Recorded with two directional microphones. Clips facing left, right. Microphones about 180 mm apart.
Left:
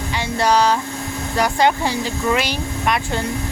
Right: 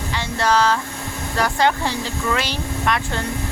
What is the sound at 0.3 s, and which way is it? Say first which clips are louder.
Speech: left 2 dB; 15° left (ahead or behind).